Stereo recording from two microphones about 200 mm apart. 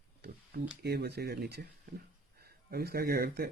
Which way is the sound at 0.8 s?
55° right (ahead or behind).